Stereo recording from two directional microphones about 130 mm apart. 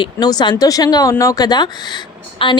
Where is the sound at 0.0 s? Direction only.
30° left (ahead or behind).